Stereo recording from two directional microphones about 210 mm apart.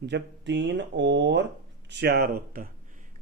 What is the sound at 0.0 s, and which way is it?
Speech, 55° right (ahead or behind).